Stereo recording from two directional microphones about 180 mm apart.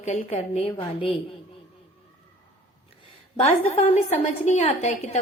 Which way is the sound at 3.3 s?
35° left (ahead or behind).